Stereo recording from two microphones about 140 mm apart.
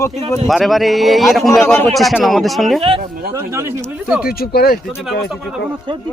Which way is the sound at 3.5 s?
20° right (ahead or behind).